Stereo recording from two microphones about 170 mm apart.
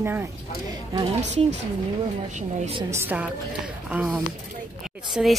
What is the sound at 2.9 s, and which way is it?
A woman's voice, 10° right (ahead or behind).